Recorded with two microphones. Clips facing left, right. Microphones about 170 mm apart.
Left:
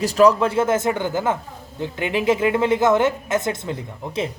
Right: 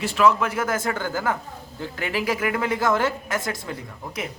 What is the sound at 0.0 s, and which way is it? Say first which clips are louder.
A woman's voice: left 5 dB; 40° left (ahead or behind).